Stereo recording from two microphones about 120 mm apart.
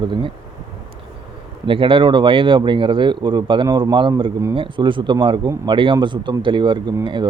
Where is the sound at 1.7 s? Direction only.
45° right (ahead or behind).